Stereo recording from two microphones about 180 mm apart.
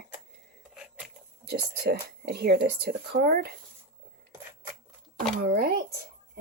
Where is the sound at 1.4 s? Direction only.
65° right (ahead or behind).